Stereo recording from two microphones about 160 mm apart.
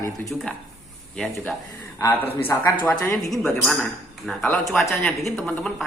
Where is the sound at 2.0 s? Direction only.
10° left (ahead or behind).